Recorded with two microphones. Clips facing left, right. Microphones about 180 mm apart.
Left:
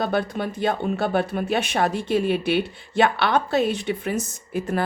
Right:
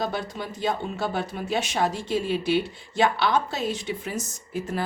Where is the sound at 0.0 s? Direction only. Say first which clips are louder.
Left 6 dB; 60° left (ahead or behind).